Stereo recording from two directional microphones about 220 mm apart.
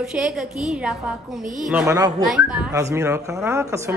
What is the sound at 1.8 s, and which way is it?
Speech, 15° right (ahead or behind).